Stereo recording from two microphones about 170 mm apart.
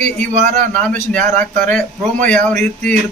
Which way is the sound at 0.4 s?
45° right (ahead or behind).